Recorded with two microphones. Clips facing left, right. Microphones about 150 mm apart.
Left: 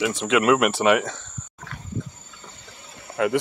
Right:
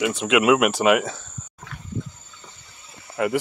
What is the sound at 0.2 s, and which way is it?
Speech, 5° right (ahead or behind).